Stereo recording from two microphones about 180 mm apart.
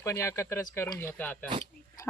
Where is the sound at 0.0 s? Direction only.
15° left (ahead or behind).